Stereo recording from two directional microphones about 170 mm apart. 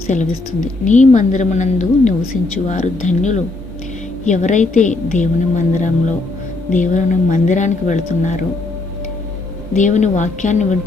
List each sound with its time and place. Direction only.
0.1 s a woman's voice: 45° left (ahead or behind)
9.7 s a woman's voice: 45° left (ahead or behind)